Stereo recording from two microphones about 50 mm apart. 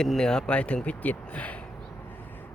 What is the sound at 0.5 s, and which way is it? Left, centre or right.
Speech, left.